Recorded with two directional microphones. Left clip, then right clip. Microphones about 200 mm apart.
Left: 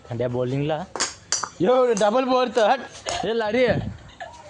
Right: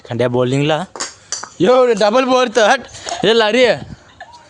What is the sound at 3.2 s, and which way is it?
Speech, 50° right (ahead or behind).